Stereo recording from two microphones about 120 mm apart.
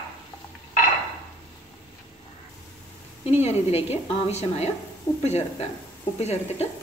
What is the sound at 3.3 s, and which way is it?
A woman's voice, 65° left (ahead or behind).